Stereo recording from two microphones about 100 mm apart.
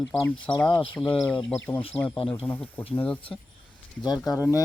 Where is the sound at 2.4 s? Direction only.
20° left (ahead or behind).